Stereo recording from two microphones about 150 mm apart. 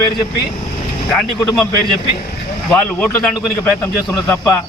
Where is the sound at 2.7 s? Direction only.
10° left (ahead or behind).